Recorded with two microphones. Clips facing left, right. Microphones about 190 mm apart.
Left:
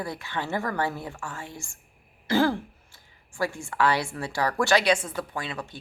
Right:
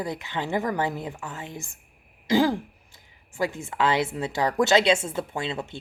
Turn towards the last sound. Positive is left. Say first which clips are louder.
# right 4 dB
turn(degrees=-25)  # may be behind; listen again after turning